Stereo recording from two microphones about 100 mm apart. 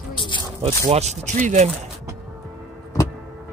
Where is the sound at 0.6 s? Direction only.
90° right.